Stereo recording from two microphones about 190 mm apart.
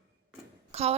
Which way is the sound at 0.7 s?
35° right (ahead or behind).